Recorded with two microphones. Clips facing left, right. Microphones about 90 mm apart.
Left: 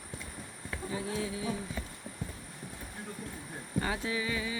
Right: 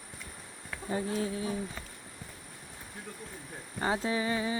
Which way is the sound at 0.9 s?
45° right (ahead or behind).